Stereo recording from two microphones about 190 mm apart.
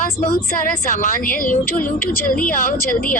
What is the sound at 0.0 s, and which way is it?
A woman's voice, 50° left (ahead or behind).